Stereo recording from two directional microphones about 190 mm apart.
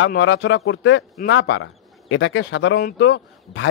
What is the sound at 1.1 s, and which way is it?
Speech, 75° left (ahead or behind).